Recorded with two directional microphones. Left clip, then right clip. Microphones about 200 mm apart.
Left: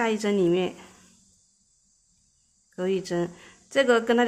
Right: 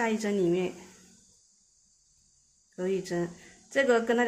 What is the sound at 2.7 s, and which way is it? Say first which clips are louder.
Speech: left 4 dB; 20° left (ahead or behind).